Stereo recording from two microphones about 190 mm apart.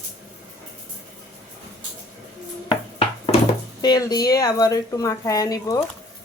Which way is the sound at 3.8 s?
20° left (ahead or behind).